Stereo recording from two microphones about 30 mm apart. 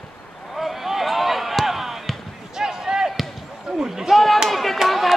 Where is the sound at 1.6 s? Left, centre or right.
Centre.